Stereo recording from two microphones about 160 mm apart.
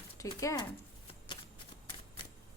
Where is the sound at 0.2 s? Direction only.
20° left (ahead or behind).